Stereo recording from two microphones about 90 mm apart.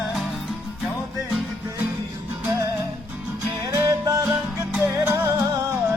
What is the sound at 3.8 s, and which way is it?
Music, 45° right (ahead or behind).